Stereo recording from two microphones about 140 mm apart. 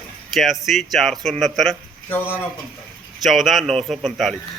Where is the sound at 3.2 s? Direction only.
Centre (ahead or behind).